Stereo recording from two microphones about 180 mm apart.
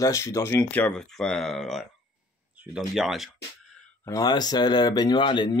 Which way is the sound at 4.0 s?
20° left (ahead or behind).